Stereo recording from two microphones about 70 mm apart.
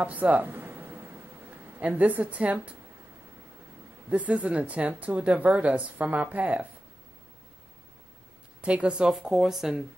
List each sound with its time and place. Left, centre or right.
0.0 s a sound: right
4.1 s a woman's voice: centre
8.5 s speech: centre